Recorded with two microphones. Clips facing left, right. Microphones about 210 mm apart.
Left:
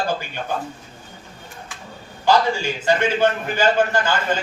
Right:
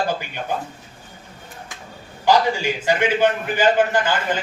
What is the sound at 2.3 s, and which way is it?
A man's voice, 15° right (ahead or behind).